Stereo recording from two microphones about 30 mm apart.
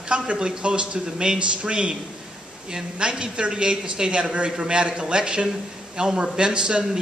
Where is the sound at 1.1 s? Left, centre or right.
Right.